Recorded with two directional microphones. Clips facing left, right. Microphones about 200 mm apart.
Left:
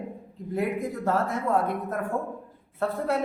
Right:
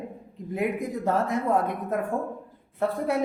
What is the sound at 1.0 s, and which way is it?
Speech, 15° right (ahead or behind).